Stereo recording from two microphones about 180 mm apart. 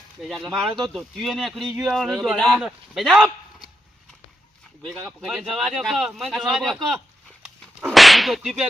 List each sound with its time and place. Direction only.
0.2 s speech: centre (ahead or behind)
4.8 s speech: 5° left (ahead or behind)
7.8 s whip: 5° right (ahead or behind)